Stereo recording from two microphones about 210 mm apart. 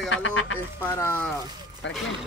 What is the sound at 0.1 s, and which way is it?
Speech, 65° left (ahead or behind).